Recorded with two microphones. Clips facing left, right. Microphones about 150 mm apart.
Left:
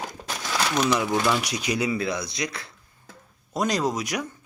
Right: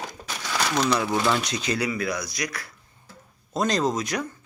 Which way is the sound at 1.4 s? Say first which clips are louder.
Even; 10° left (ahead or behind).